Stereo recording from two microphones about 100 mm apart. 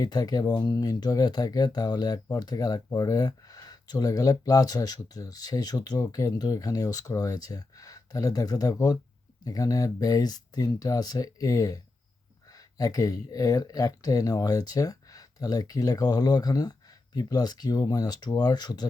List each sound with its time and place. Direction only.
0.0 s speech: 40° left (ahead or behind)